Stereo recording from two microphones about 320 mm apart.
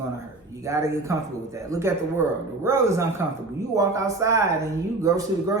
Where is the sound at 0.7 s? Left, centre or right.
Centre.